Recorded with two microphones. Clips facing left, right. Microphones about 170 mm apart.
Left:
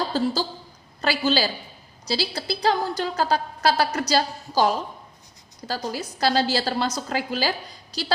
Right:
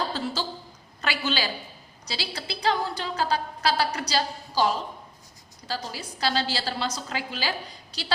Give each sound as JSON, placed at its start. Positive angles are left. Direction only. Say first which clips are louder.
{"t": 0.1, "sound": "a woman's voice", "louder": "left 6 dB", "side_deg": 40}